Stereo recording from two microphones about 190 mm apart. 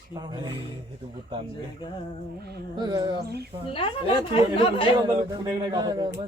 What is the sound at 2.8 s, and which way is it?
Speech, 20° right (ahead or behind).